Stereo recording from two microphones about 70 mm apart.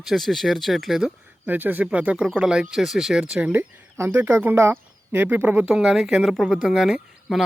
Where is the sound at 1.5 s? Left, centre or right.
Right.